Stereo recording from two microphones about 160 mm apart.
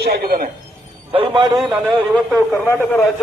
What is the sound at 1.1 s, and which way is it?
Speech, 30° right (ahead or behind).